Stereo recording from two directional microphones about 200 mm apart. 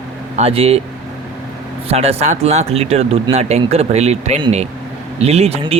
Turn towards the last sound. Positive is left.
turn(degrees=-30)  # may be behind; listen again after turning